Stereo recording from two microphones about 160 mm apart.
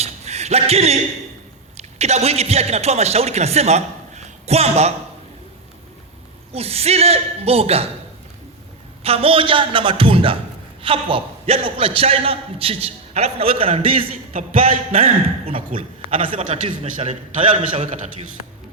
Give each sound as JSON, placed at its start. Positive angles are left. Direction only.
{"t": 0.0, "sound": "a sound", "side_deg": -45}
{"t": 1.7, "sound": "speech", "side_deg": -40}
{"t": 6.5, "sound": "a man's voice", "side_deg": -40}
{"t": 9.0, "sound": "a man's voice", "side_deg": -35}
{"t": 16.2, "sound": "a man's voice", "side_deg": -55}
{"t": 17.5, "sound": "a man's voice", "side_deg": -50}